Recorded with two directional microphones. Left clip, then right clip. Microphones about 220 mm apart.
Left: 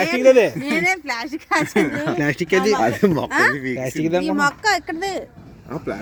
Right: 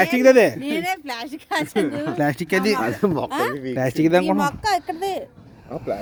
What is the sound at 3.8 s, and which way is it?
Speech, 40° right (ahead or behind).